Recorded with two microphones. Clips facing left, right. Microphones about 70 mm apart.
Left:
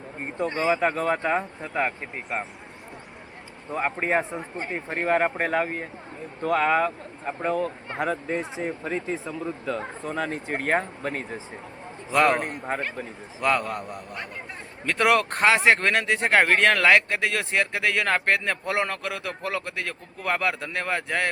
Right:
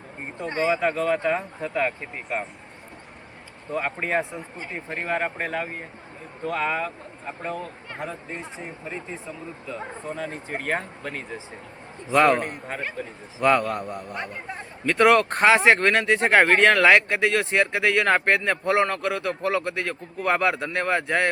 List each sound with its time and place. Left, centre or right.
0.4 s speech: right
0.7 s speech: left
2.3 s speech: centre
3.8 s speech: left
4.4 s speech: left
7.9 s speech: left
9.6 s speech: left
12.1 s speech: centre